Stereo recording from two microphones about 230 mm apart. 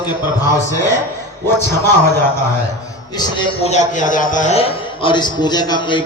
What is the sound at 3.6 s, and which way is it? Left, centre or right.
A man's voice, left.